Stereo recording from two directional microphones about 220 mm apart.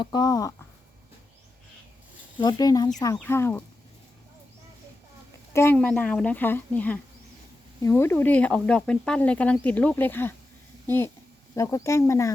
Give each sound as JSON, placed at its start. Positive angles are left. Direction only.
{"t": 0.0, "sound": "speech", "side_deg": 20}
{"t": 2.4, "sound": "speech", "side_deg": 20}
{"t": 5.5, "sound": "a woman's voice", "side_deg": 10}